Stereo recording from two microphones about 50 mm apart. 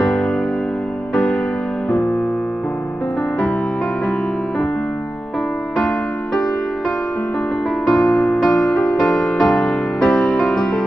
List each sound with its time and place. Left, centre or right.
1.1 s music: centre
1.9 s music: left
5.8 s music: centre
7.9 s music: left
9.0 s music: centre